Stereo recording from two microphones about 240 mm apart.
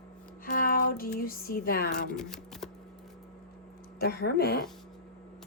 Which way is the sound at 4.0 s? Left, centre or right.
Left.